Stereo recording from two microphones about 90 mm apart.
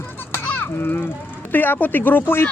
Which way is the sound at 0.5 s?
20° left (ahead or behind).